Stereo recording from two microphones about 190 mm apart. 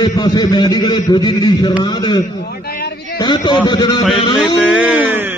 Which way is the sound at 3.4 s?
20° left (ahead or behind).